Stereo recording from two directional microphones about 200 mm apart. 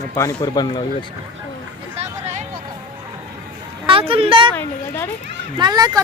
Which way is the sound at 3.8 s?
25° right (ahead or behind).